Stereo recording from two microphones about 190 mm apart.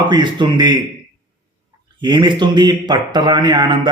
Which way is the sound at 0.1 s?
25° right (ahead or behind).